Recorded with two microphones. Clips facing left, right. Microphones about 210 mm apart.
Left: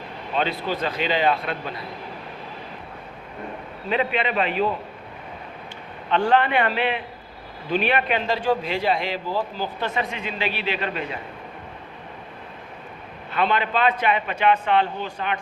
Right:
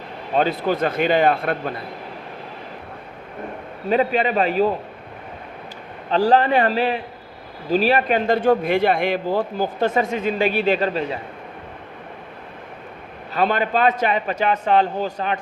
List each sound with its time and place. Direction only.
0.3 s a man's voice: 45° right (ahead or behind)
3.8 s a man's voice: 40° right (ahead or behind)
6.1 s a man's voice: 35° right (ahead or behind)
13.3 s a man's voice: 45° right (ahead or behind)